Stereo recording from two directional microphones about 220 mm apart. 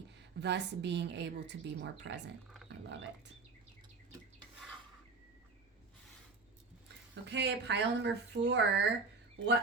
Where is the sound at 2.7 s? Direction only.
55° right (ahead or behind).